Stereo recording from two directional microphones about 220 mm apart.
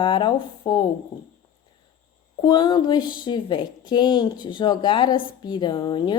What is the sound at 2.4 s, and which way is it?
Speech, 20° left (ahead or behind).